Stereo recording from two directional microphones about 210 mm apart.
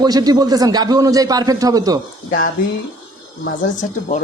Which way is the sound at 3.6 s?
35° left (ahead or behind).